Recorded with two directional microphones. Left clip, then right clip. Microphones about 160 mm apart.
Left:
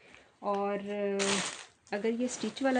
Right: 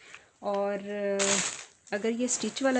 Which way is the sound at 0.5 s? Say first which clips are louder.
Right 4 dB; 35° right (ahead or behind).